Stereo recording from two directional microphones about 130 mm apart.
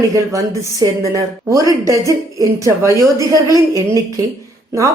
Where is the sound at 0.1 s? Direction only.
25° right (ahead or behind).